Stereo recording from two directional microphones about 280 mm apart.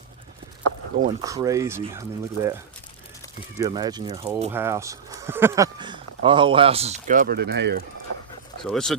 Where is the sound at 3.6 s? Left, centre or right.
Centre.